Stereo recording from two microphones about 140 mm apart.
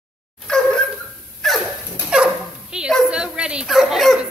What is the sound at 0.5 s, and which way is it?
Dog, 5° left (ahead or behind).